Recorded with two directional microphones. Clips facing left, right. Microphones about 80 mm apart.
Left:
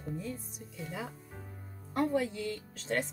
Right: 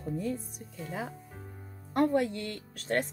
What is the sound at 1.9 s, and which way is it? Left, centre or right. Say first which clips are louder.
Speech: right 4 dB; right.